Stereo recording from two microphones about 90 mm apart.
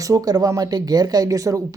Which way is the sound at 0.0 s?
40° right (ahead or behind).